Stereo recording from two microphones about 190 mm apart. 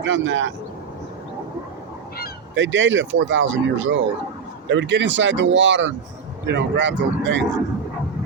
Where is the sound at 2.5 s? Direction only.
75° right (ahead or behind).